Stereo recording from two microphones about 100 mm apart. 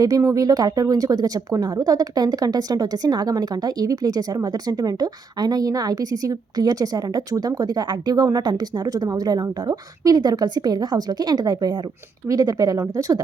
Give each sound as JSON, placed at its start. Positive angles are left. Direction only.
{"t": 0.2, "sound": "a woman's voice", "side_deg": -35}